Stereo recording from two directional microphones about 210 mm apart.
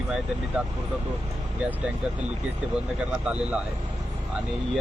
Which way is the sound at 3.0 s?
5° right (ahead or behind).